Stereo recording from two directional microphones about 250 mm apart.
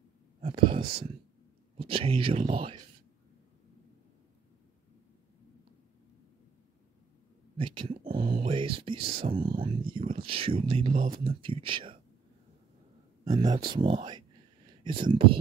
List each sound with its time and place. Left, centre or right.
0.4 s speech: right
7.5 s a sound: centre
8.3 s speech: centre
13.2 s speech: centre